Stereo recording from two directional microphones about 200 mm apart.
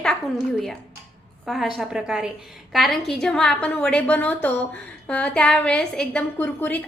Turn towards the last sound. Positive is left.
turn(degrees=10)  # may be behind; listen again after turning